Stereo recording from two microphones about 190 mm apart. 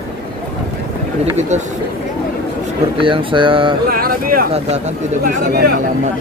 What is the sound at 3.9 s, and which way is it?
Speech, 50° right (ahead or behind).